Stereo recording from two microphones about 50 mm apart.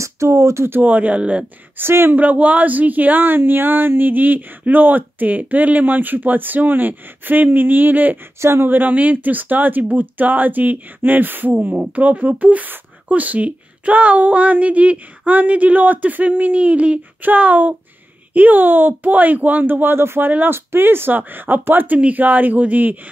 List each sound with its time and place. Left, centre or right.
0.0 s speech: right
0.7 s speech: right
1.8 s speech: right
2.1 s speech: right
8.4 s speech: right
8.6 s speech: right
20.2 s speech: right
20.5 s speech: right